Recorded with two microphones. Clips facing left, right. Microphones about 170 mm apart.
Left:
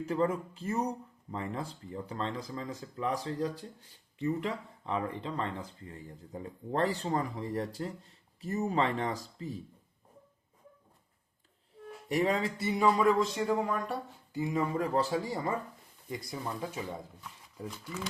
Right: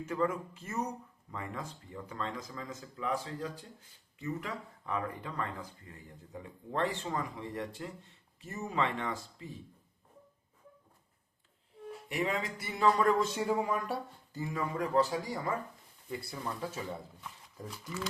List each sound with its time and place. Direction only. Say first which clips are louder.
0.0 s speech: left 3 dB; 30° left (ahead or behind)
12.0 s speech: left 5 dB; 40° left (ahead or behind)
12.7 s speech: left 1 dB; 10° left (ahead or behind)
14.3 s speech: left 4 dB; 20° left (ahead or behind)